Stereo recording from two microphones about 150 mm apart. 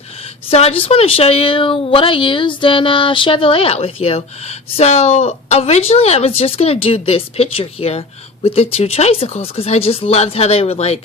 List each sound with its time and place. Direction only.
0.5 s speech: 40° left (ahead or behind)